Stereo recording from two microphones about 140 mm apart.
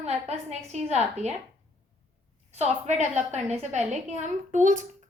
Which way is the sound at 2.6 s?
55° right (ahead or behind).